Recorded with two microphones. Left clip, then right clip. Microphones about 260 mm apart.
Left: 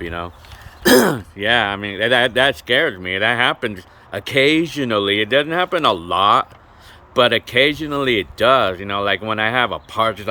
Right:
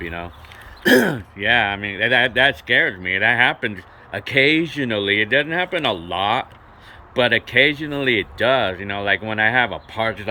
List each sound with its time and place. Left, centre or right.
0.0 s speech: centre